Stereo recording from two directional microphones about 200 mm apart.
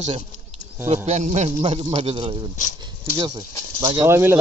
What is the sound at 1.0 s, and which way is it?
A man's voice, 35° right (ahead or behind).